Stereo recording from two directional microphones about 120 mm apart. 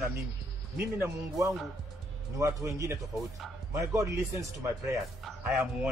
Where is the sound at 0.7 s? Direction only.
15° right (ahead or behind).